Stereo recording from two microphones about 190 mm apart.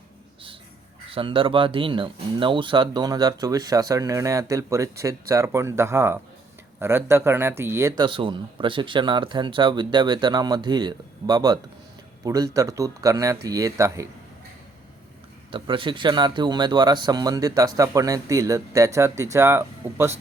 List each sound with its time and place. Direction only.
1.1 s speech: 25° right (ahead or behind)
15.5 s speech: 25° right (ahead or behind)